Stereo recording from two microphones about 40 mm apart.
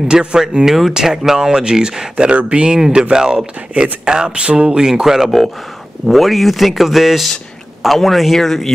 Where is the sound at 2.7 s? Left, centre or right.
Centre.